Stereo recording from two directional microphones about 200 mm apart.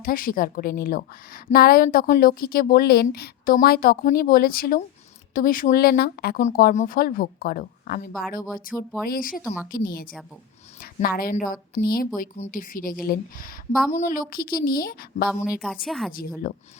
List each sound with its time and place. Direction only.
0.0 s a woman's voice: 45° left (ahead or behind)
15.4 s a woman's voice: centre (ahead or behind)
16.4 s a woman's voice: 45° left (ahead or behind)